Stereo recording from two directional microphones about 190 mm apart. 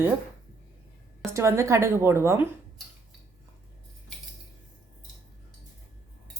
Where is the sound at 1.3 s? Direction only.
15° right (ahead or behind).